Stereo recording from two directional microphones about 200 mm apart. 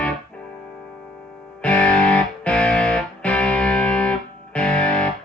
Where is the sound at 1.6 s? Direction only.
5° left (ahead or behind).